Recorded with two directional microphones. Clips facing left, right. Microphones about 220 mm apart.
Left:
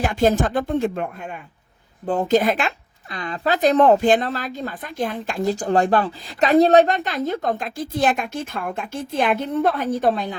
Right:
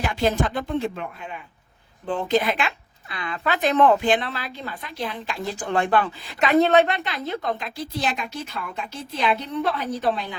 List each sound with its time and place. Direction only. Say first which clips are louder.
0.0 s speech: left 4 dB; 45° left (ahead or behind)